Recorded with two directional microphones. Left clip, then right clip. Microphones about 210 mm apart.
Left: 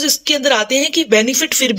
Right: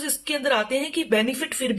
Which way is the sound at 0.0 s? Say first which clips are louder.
Left 11 dB; 30° left (ahead or behind).